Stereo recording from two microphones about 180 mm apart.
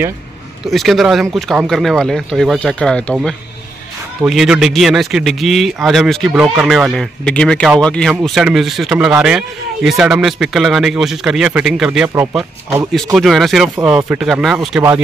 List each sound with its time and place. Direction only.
0.7 s speech: centre (ahead or behind)
12.1 s speech: 15° right (ahead or behind)
12.9 s speech: centre (ahead or behind)